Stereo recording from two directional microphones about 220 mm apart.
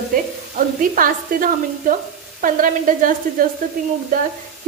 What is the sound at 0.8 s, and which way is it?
Sizzle, 40° right (ahead or behind).